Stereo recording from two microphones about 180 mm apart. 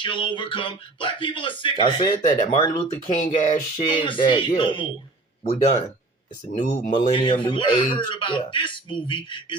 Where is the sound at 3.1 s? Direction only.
40° left (ahead or behind).